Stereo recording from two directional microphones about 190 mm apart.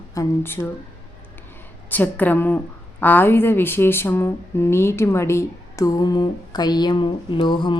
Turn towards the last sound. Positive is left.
turn(degrees=25)  # may be behind; listen again after turning